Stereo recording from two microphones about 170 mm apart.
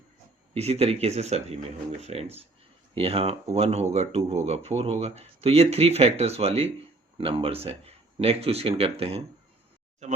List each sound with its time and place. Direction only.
0.5 s speech: 40° right (ahead or behind)